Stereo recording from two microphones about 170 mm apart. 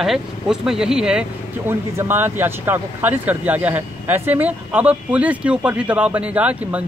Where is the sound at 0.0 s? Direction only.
Centre (ahead or behind).